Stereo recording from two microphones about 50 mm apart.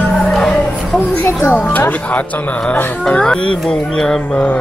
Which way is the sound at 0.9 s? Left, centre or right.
Left.